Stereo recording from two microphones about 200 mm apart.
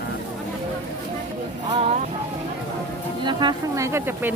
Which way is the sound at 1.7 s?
35° right (ahead or behind).